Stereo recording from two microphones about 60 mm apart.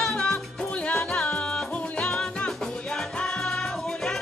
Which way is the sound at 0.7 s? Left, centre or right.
Centre.